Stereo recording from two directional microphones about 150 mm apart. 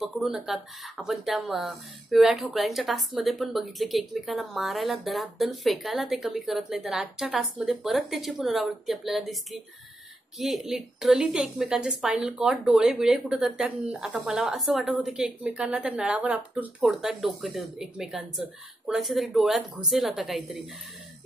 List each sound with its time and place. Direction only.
0.0 s speech: 5° right (ahead or behind)